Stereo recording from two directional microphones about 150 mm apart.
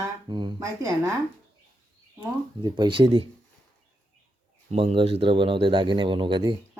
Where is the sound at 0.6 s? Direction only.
20° right (ahead or behind).